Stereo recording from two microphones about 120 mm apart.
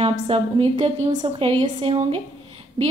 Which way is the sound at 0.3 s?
55° right (ahead or behind).